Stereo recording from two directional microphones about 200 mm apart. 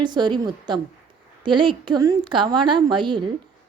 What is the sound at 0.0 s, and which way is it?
A woman's voice, 20° right (ahead or behind).